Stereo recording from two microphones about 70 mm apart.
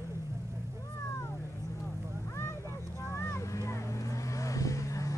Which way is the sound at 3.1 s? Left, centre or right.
Left.